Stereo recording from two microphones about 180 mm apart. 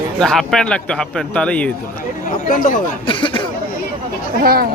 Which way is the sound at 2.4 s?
50° left (ahead or behind).